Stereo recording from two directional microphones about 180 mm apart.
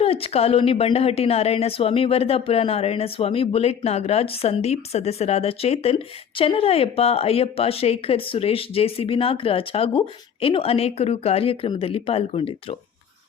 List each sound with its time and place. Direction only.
0.0 s a woman's voice: 35° left (ahead or behind)